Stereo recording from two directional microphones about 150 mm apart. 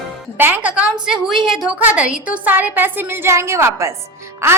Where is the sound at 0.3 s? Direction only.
15° right (ahead or behind).